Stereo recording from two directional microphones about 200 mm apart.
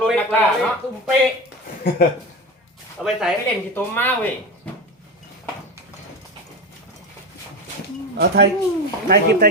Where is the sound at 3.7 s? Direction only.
10° left (ahead or behind).